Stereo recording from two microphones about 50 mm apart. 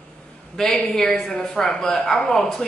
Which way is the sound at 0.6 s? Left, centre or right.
Centre.